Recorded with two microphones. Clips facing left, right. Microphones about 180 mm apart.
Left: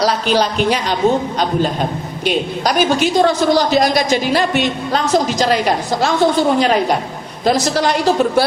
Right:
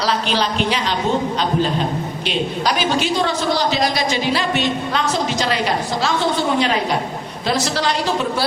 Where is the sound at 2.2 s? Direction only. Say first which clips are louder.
Left 4 dB; 45° left (ahead or behind).